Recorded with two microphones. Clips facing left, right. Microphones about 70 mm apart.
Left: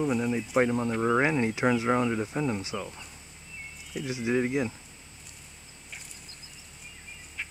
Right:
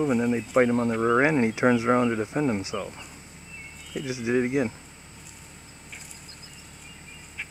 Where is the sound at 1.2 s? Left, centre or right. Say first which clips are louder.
Right 4 dB; right.